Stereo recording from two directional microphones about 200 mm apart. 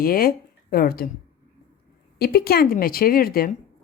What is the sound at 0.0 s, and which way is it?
Speech, 45° left (ahead or behind).